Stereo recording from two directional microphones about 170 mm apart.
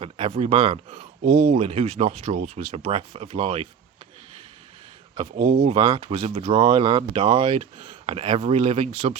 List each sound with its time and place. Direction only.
0.0 s speech: 35° right (ahead or behind)
5.4 s speech: 45° right (ahead or behind)